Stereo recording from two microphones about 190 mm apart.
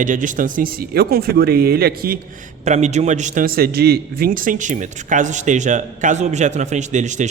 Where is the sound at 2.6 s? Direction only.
35° right (ahead or behind).